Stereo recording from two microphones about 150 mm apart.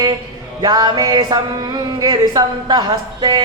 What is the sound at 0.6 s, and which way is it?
A woman's voice, 25° right (ahead or behind).